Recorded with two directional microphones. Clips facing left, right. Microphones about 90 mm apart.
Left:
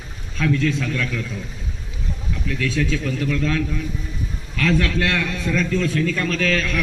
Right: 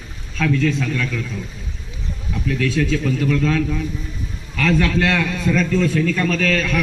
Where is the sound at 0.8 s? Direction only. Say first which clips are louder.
Right 2 dB; centre (ahead or behind).